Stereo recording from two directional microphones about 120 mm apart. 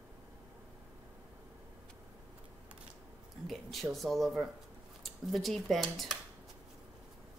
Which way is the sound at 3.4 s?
Centre (ahead or behind).